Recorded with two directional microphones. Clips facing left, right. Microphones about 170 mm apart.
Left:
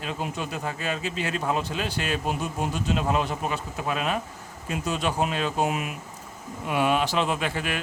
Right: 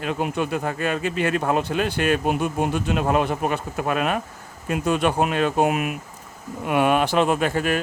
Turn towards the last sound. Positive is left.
turn(degrees=-45)  # may be behind; listen again after turning